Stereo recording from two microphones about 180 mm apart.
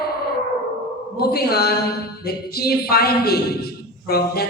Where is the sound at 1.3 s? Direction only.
60° left (ahead or behind).